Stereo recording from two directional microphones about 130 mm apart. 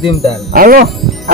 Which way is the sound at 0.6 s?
90° right.